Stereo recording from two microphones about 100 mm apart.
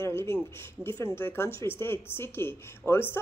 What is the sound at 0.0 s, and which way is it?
Speech, 25° left (ahead or behind).